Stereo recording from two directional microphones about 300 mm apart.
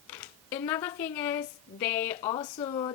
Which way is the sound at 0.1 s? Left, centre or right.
Centre.